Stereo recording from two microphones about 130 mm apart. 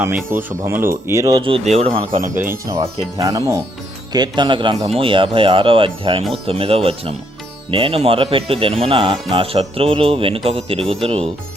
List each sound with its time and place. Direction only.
0.3 s speech: 20° right (ahead or behind)
1.4 s speech: 45° right (ahead or behind)
1.6 s speech: 60° right (ahead or behind); by 2.3 s 75° right (ahead or behind)
2.6 s a man's voice: 25° right (ahead or behind)
4.9 s speech: 45° right (ahead or behind)